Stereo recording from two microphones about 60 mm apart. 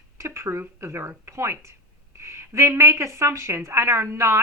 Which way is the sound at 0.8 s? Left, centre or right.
Right.